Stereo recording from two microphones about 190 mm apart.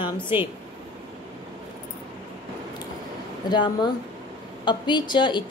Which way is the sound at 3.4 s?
25° left (ahead or behind).